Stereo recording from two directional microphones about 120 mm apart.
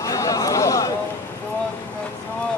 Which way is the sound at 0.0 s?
30° left (ahead or behind).